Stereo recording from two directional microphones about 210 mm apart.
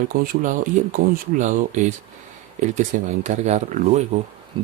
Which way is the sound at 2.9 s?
35° right (ahead or behind).